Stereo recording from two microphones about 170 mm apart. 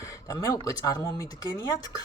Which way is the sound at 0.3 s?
20° left (ahead or behind).